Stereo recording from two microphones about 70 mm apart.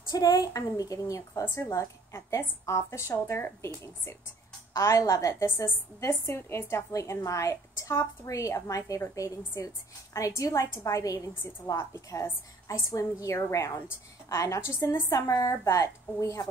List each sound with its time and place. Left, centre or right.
0.1 s speech: left
1.4 s a woman's voice: left
1.7 s a woman's voice: left
4.7 s a woman's voice: left
6.9 s a woman's voice: left
11.7 s a woman's voice: left